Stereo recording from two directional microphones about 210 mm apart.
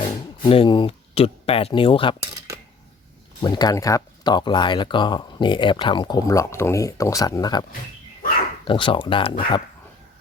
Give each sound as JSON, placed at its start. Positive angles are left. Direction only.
{"t": 0.4, "sound": "speech", "side_deg": 25}
{"t": 3.4, "sound": "speech", "side_deg": 20}
{"t": 8.6, "sound": "speech", "side_deg": 25}